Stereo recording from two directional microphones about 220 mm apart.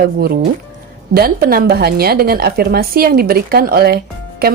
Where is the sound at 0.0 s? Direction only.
45° right (ahead or behind).